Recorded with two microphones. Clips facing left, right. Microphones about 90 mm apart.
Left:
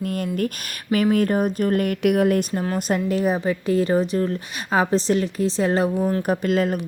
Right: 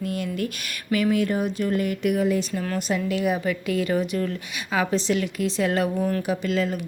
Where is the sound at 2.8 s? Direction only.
45° left (ahead or behind).